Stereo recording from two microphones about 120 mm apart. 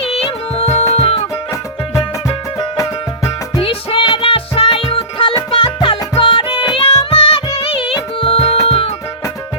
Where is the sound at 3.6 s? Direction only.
50° left (ahead or behind).